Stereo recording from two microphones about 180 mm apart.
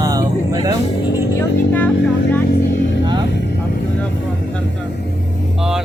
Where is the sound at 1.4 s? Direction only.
10° left (ahead or behind).